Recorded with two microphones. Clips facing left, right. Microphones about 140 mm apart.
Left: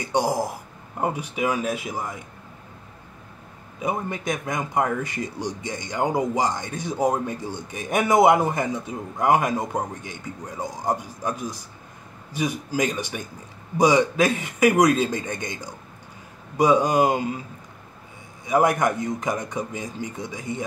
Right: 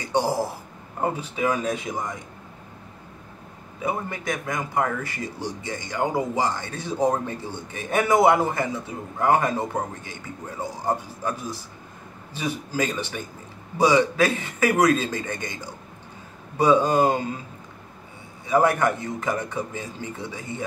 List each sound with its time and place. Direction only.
0.1 s a man's voice: 15° left (ahead or behind)
3.8 s a man's voice: 20° left (ahead or behind)
18.5 s a man's voice: 15° left (ahead or behind)